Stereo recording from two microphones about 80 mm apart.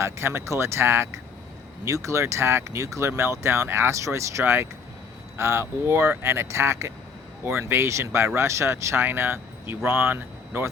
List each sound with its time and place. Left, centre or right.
0.0 s speech: right